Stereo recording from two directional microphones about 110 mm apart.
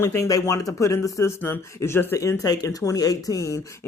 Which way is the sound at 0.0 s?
25° left (ahead or behind).